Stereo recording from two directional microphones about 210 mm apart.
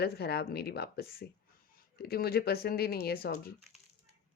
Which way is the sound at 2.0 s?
50° left (ahead or behind).